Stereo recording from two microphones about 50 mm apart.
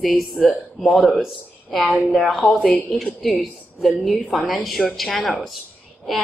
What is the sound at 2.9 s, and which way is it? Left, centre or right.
Speech, centre.